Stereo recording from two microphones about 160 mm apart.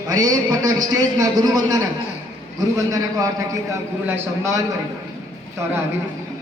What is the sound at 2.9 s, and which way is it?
A man's voice, 20° right (ahead or behind).